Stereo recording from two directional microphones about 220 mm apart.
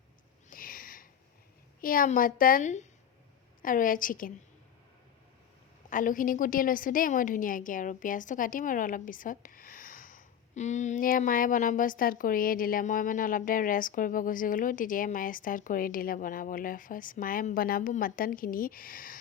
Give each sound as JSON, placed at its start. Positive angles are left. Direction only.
{"t": 0.5, "sound": "sniff", "side_deg": 40}
{"t": 1.8, "sound": "a woman's voice", "side_deg": 40}
{"t": 5.9, "sound": "a woman's voice", "side_deg": 35}